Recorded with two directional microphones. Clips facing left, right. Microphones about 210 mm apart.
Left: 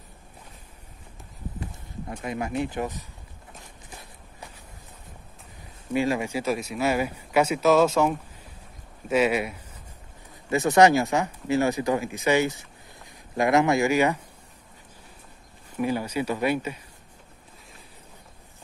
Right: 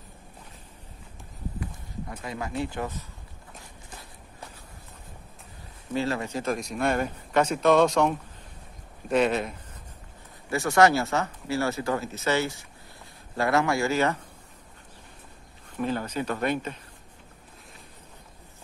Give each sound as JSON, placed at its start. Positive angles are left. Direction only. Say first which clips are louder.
{"t": 1.6, "sound": "speech", "louder": "even", "side_deg": 25}
{"t": 5.9, "sound": "speech", "louder": "left 3 dB", "side_deg": 15}
{"t": 10.5, "sound": "speech", "louder": "left 3 dB", "side_deg": 20}
{"t": 15.7, "sound": "speech", "louder": "left 2 dB", "side_deg": 10}